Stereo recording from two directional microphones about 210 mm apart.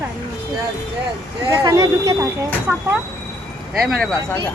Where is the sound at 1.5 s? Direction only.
15° right (ahead or behind).